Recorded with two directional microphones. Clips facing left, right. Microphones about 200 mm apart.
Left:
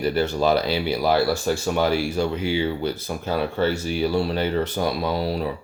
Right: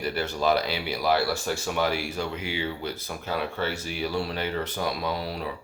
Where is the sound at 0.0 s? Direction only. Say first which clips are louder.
Left 6 dB; 30° left (ahead or behind).